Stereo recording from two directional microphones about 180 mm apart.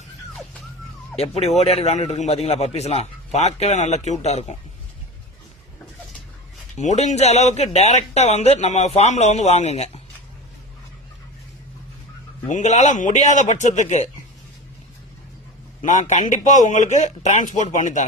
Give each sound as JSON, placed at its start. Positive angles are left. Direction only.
{"t": 1.4, "sound": "speech", "side_deg": 40}
{"t": 6.7, "sound": "speech", "side_deg": 40}
{"t": 12.5, "sound": "a man's voice", "side_deg": 40}
{"t": 15.8, "sound": "a man's voice", "side_deg": 45}